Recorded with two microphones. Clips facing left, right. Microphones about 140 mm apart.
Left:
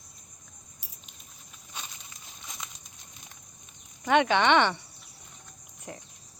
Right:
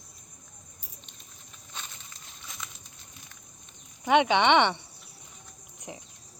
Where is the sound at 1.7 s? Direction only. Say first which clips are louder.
Left 1 dB; 10° left (ahead or behind).